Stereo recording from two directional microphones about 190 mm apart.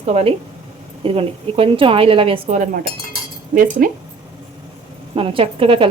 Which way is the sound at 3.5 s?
45° right (ahead or behind).